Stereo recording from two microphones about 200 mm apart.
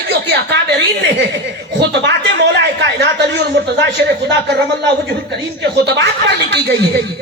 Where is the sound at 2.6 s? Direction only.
60° right (ahead or behind).